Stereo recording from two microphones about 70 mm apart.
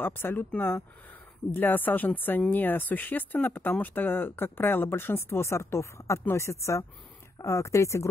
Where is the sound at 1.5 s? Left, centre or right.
Left.